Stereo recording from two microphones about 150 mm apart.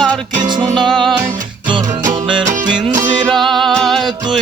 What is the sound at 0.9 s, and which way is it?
Music, centre (ahead or behind).